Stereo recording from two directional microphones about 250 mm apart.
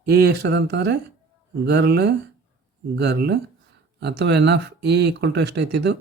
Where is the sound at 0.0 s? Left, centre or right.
Right.